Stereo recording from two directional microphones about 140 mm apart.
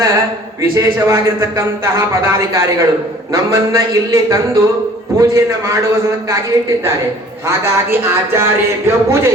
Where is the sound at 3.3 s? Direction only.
25° right (ahead or behind).